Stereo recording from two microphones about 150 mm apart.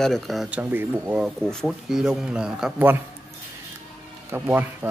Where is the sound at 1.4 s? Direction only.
5° left (ahead or behind); by 3.0 s 10° right (ahead or behind).